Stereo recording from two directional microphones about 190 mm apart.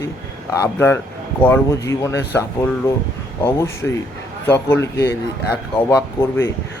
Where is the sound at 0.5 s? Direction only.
15° left (ahead or behind).